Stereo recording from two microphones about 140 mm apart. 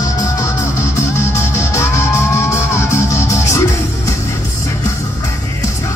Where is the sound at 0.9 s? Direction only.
20° left (ahead or behind).